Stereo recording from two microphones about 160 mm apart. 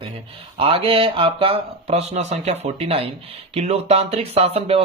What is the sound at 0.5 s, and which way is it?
Speech, 35° right (ahead or behind).